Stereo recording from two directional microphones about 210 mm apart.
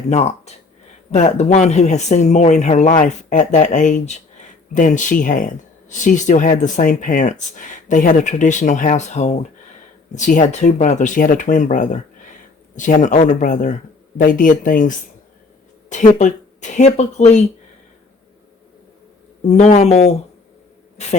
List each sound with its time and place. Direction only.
0.1 s speech: 30° left (ahead or behind)
19.5 s speech: 35° left (ahead or behind)